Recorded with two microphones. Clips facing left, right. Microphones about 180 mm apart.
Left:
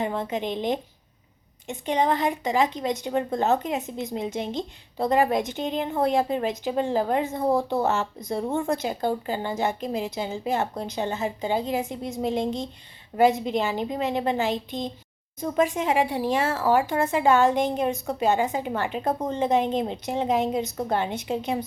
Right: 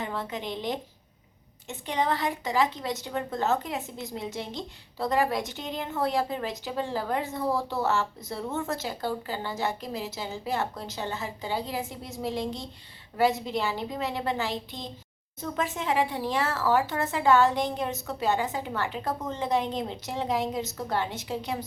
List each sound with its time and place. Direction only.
0.0 s speech: 20° left (ahead or behind)